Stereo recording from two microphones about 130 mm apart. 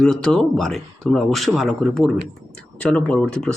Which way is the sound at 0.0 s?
5° left (ahead or behind).